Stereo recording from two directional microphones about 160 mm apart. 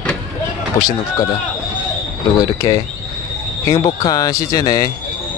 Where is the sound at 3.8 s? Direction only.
25° left (ahead or behind).